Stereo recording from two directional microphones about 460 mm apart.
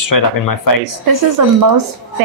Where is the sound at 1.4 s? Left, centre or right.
Right.